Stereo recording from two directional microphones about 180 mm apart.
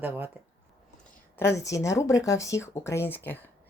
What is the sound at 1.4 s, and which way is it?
Speech, 15° left (ahead or behind).